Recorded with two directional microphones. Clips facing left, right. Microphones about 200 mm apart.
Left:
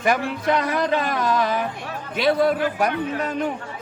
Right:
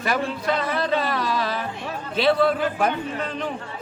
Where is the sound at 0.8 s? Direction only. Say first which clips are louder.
Left 2 dB; 15° left (ahead or behind).